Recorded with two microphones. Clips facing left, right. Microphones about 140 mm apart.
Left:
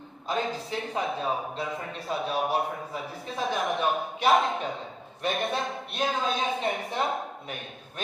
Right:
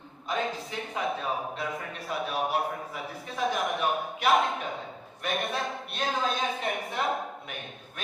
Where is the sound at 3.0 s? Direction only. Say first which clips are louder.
Right 1 dB; centre (ahead or behind).